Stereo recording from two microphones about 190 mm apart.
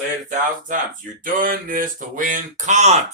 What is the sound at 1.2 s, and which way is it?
Speech, 45° right (ahead or behind).